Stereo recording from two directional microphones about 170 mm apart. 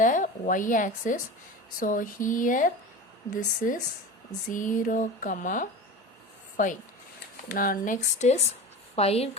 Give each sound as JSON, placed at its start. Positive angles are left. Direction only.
{"t": 0.0, "sound": "speech", "side_deg": 50}